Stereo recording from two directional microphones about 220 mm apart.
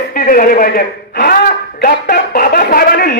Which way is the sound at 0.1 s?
40° left (ahead or behind).